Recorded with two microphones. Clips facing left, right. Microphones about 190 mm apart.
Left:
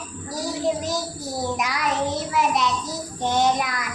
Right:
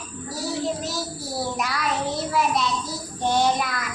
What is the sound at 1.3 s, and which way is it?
Child singing, 15° left (ahead or behind).